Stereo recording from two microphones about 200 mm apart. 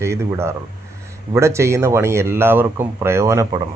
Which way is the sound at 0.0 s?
15° right (ahead or behind).